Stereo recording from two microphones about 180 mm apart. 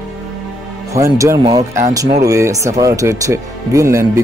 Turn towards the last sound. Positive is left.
turn(degrees=-15)  # may be behind; listen again after turning